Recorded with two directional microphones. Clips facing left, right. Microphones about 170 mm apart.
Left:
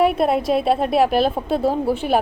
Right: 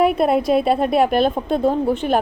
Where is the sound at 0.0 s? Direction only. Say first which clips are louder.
Right 1 dB; centre (ahead or behind).